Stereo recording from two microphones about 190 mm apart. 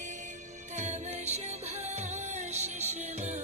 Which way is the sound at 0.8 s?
35° right (ahead or behind).